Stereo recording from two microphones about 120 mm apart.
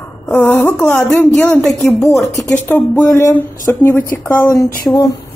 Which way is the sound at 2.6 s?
15° left (ahead or behind).